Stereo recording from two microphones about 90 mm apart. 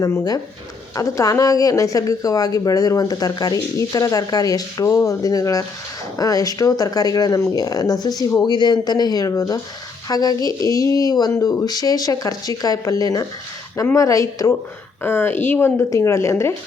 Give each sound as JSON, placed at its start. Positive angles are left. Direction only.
{"t": 0.0, "sound": "speech", "side_deg": 40}
{"t": 15.0, "sound": "speech", "side_deg": 25}